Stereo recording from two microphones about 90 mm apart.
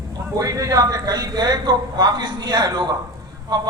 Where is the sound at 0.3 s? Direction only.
40° right (ahead or behind).